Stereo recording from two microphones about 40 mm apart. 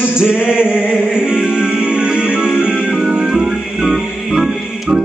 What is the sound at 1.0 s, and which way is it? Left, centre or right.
Music, right.